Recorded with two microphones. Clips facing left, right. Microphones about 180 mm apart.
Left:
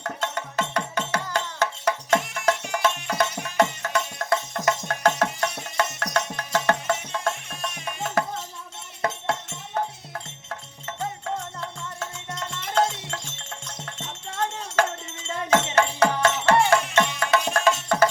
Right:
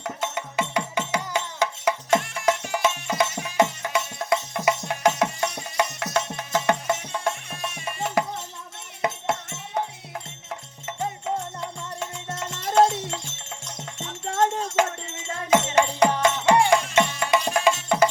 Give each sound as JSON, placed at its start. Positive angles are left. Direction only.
{"t": 0.0, "sound": "music", "side_deg": -10}
{"t": 11.6, "sound": "music", "side_deg": -15}
{"t": 14.3, "sound": "music", "side_deg": -45}
{"t": 15.4, "sound": "music", "side_deg": -15}